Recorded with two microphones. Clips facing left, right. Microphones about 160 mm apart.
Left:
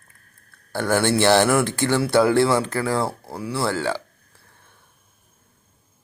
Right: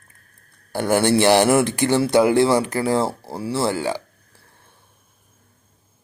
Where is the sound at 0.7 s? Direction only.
15° right (ahead or behind).